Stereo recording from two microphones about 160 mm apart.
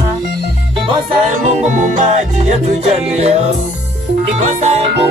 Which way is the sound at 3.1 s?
40° right (ahead or behind).